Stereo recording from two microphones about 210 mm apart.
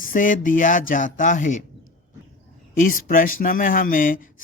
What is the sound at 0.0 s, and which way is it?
Speech, 40° left (ahead or behind).